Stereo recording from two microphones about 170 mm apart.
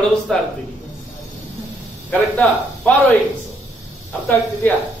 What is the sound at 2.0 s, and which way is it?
Speech, 5° left (ahead or behind).